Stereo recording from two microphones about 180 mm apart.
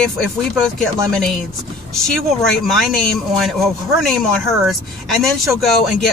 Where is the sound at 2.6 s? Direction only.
Centre (ahead or behind).